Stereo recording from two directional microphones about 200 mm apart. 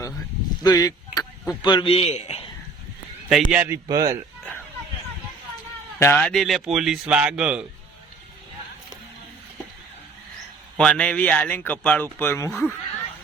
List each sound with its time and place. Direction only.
0.6 s a man's voice: 20° left (ahead or behind)
3.2 s a man's voice: 5° right (ahead or behind)
6.0 s speech: 10° left (ahead or behind)
10.8 s speech: 5° left (ahead or behind)
12.5 s speech: centre (ahead or behind)